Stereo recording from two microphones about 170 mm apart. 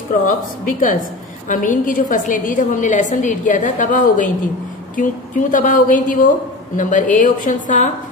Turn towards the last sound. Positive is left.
turn(degrees=50)  # may be behind; listen again after turning